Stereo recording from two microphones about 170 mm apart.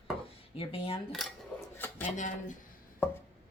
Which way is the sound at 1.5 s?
5° left (ahead or behind).